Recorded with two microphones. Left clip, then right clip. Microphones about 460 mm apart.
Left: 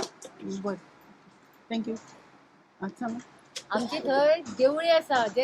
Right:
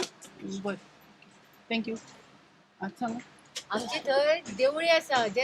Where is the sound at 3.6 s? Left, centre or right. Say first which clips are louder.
Left 2 dB; right.